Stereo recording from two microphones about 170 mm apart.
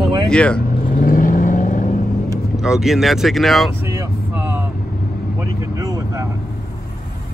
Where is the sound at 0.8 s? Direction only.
55° left (ahead or behind).